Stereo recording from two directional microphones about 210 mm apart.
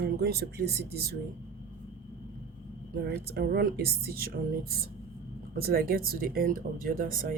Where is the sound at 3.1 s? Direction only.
50° right (ahead or behind).